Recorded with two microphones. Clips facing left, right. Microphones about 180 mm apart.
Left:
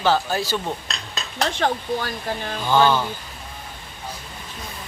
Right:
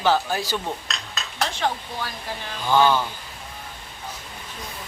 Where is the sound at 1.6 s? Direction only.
50° left (ahead or behind).